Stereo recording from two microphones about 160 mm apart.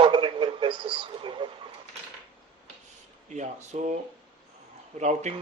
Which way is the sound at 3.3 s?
45° right (ahead or behind).